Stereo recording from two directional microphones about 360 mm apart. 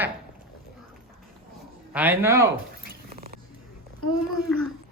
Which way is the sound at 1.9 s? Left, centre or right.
Centre.